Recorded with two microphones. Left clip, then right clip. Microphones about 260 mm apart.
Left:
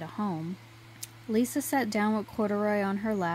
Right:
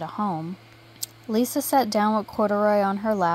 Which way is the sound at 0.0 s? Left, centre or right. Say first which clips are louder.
Right 7 dB; centre.